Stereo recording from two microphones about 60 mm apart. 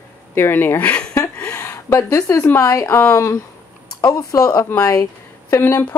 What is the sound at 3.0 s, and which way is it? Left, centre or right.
Speech, left.